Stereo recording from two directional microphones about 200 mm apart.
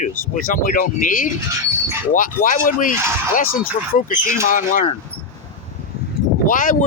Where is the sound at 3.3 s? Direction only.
45° left (ahead or behind).